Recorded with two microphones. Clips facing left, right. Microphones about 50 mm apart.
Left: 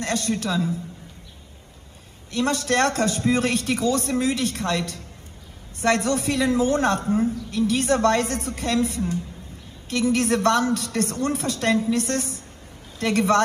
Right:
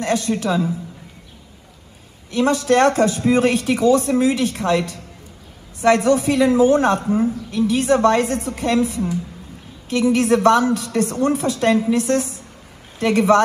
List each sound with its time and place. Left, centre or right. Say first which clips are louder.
0.0 s a woman's voice: right 5 dB; right
2.3 s a woman's voice: right 6 dB; right